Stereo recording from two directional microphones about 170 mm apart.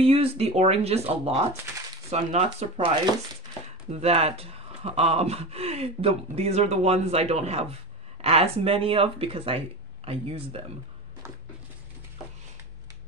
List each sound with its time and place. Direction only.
0.0 s speech: 35° right (ahead or behind)
3.9 s speech: 35° right (ahead or behind)